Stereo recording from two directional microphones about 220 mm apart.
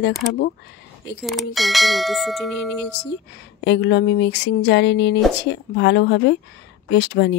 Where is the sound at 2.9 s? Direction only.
50° left (ahead or behind).